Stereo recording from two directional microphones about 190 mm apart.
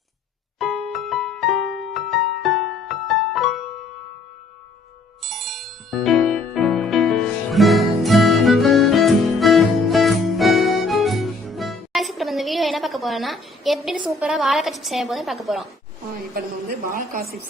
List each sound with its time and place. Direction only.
0.6 s music: centre (ahead or behind)
5.2 s music: centre (ahead or behind)
16.3 s a woman's voice: 50° right (ahead or behind)